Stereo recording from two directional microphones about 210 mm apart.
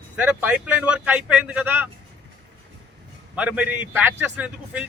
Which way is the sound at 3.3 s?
5° right (ahead or behind).